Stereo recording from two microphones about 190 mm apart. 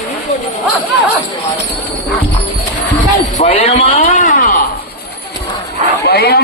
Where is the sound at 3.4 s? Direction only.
35° left (ahead or behind).